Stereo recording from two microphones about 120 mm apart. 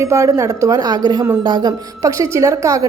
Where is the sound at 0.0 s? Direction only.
25° right (ahead or behind).